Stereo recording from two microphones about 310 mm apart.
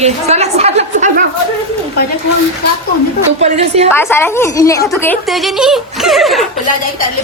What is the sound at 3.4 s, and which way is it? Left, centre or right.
Speech, right.